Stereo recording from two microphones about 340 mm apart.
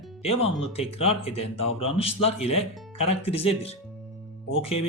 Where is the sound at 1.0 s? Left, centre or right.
Centre.